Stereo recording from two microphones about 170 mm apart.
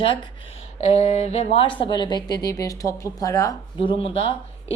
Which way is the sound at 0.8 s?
40° left (ahead or behind).